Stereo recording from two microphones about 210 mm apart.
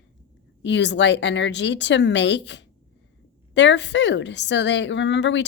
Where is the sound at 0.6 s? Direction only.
60° left (ahead or behind).